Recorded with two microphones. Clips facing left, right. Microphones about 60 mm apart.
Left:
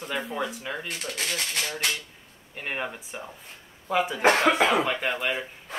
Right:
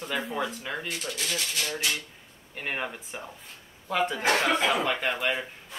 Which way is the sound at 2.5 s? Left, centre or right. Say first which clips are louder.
Left 1 dB; centre.